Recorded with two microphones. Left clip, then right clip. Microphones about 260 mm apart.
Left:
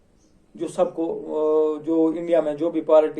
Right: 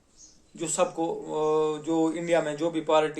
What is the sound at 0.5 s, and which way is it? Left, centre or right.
Speech, right.